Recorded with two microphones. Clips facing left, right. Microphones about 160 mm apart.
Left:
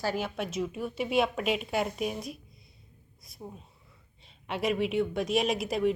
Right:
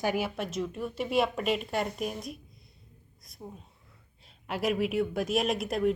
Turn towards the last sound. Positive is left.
turn(degrees=0)  # may be behind; listen again after turning